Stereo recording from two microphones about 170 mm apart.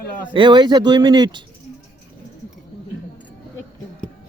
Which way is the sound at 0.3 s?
25° right (ahead or behind).